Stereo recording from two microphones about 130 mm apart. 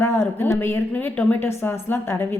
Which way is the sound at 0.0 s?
20° left (ahead or behind).